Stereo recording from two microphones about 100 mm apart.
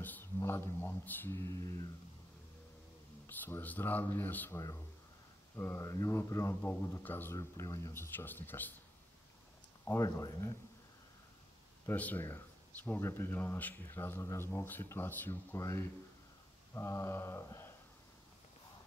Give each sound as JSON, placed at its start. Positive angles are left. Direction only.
{"t": 0.0, "sound": "a sound", "side_deg": 20}
{"t": 0.4, "sound": "speech", "side_deg": 30}
{"t": 3.3, "sound": "speech", "side_deg": 20}
{"t": 5.6, "sound": "speech", "side_deg": 30}
{"t": 7.3, "sound": "speech", "side_deg": 35}
{"t": 7.9, "sound": "speech", "side_deg": 25}
{"t": 9.8, "sound": "speech", "side_deg": 30}
{"t": 11.8, "sound": "speech", "side_deg": 15}